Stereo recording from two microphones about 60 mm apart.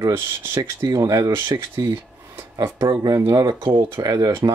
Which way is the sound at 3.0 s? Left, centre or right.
Right.